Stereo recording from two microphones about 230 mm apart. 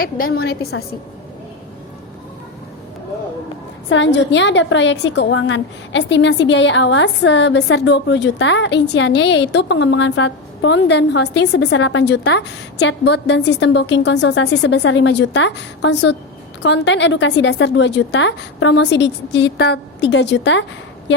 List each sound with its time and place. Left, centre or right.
0.0 s a woman's voice: left
3.8 s a woman's voice: left